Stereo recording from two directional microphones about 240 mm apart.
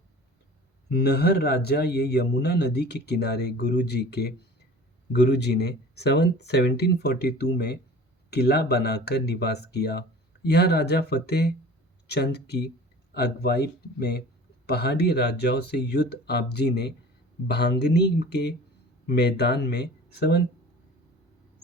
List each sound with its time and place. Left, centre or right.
0.9 s speech: left
5.3 s speech: left